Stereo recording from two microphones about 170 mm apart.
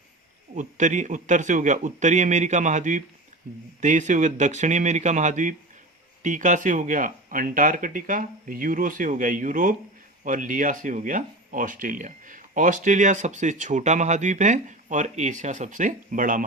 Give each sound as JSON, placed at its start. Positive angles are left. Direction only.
{"t": 0.5, "sound": "speech", "side_deg": -45}